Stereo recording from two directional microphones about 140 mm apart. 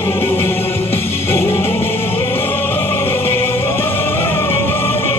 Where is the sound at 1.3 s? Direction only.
20° left (ahead or behind).